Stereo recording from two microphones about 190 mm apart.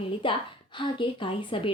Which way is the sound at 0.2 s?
25° left (ahead or behind).